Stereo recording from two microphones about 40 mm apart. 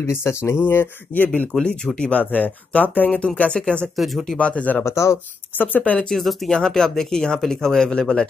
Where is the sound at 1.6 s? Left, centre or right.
Left.